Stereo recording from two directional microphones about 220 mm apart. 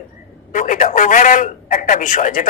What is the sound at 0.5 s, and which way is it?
A woman's voice, 35° left (ahead or behind).